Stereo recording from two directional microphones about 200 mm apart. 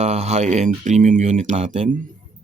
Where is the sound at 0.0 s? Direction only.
35° right (ahead or behind).